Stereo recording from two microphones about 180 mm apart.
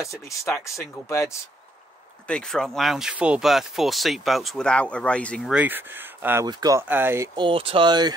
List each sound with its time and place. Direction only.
0.0 s speech: 15° left (ahead or behind)
2.2 s speech: 5° left (ahead or behind)
5.5 s speech: 10° right (ahead or behind)
7.3 s speech: 30° right (ahead or behind)